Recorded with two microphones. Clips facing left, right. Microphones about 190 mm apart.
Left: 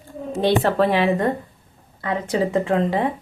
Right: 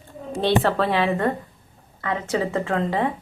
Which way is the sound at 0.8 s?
15° left (ahead or behind).